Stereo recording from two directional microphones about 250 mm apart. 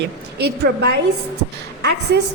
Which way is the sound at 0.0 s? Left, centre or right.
Right.